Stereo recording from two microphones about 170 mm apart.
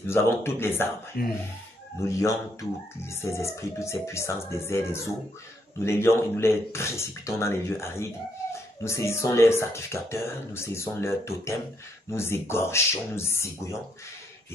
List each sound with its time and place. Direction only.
0.0 s speech: 15° left (ahead or behind)
1.2 s speech: 60° left (ahead or behind)
2.0 s speech: 15° left (ahead or behind)